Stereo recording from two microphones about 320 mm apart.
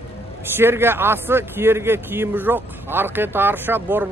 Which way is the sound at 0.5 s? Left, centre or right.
Centre.